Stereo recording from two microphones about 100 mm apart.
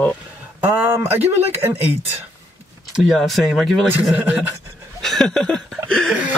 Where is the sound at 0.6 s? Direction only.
20° right (ahead or behind).